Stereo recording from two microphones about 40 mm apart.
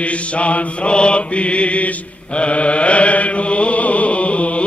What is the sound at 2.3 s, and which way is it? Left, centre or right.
Chant, left.